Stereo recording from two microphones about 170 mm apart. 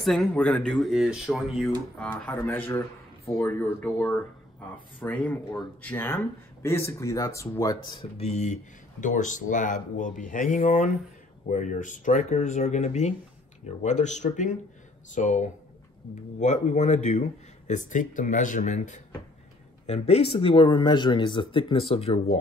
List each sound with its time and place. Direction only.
0.0 s speech: centre (ahead or behind); by 8.1 s 30° left (ahead or behind)
8.2 s speech: 45° left (ahead or behind)
19.9 s speech: 35° left (ahead or behind)